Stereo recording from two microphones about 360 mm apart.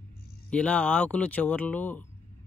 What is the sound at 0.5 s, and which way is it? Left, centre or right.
Speech, centre.